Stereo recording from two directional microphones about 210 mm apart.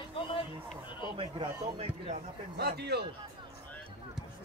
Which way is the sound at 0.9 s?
20° left (ahead or behind).